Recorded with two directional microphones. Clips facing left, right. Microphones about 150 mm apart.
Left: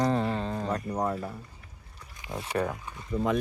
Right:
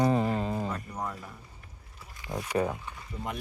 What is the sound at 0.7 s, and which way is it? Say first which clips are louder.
Speech: left 7 dB; 35° left (ahead or behind).